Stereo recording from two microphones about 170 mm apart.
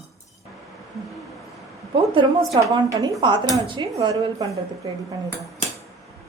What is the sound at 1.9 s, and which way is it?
A woman's voice, 30° right (ahead or behind).